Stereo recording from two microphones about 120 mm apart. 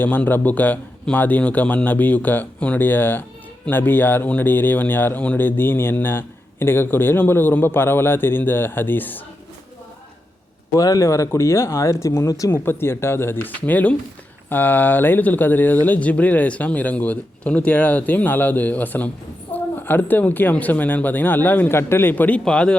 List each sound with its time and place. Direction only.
0.0 s speech: 15° left (ahead or behind)
10.8 s speech: 30° left (ahead or behind); by 22.8 s 5° left (ahead or behind)